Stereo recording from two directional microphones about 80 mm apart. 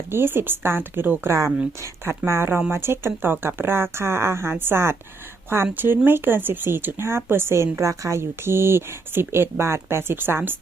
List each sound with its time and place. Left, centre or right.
0.1 s speech: right
1.3 s speech: right